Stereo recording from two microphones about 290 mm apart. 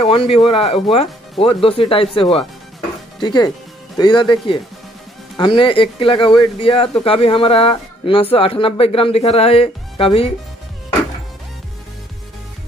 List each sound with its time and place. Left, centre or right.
0.0 s speech: centre